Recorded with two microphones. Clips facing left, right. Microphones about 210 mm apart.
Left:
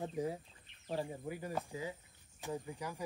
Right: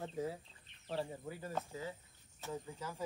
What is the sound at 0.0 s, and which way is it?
Speech, 15° left (ahead or behind).